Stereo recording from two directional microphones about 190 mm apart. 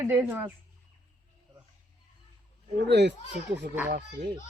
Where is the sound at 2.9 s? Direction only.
65° right (ahead or behind).